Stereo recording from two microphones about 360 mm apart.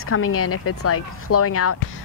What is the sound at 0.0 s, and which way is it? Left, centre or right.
Speech, left.